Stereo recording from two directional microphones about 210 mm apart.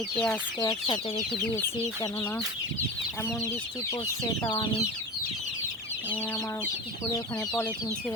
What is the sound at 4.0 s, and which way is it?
Speech, 20° left (ahead or behind).